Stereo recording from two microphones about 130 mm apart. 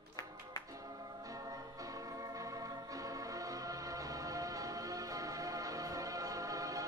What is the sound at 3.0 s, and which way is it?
Music, 25° right (ahead or behind).